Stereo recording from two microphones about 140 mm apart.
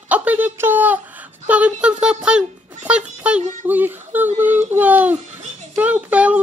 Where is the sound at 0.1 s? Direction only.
10° right (ahead or behind).